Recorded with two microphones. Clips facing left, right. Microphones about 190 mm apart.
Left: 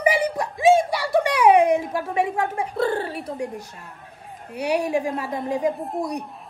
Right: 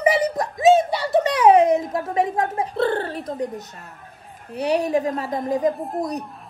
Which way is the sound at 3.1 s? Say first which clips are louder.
Right 2 dB; 10° left (ahead or behind).